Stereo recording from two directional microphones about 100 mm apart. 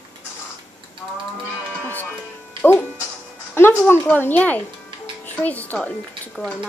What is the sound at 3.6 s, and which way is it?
A child's voice, 20° left (ahead or behind).